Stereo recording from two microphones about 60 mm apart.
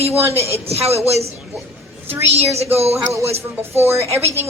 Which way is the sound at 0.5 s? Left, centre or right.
Right.